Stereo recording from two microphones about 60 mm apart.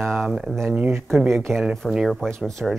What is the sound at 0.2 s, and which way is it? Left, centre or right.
Speech, centre.